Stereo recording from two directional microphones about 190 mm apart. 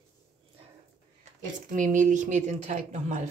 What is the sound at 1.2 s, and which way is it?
Speech, 40° right (ahead or behind).